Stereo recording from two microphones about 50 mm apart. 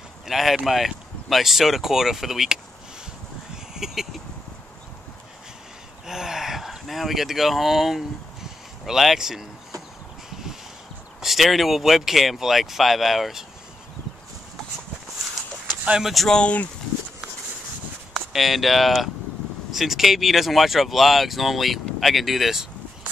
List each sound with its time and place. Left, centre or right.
0.3 s speech: centre
3.7 s a sound: centre
6.0 s speech: centre
11.1 s speech: centre
16.0 s speech: centre
16.3 s speech: centre
18.1 s speech: centre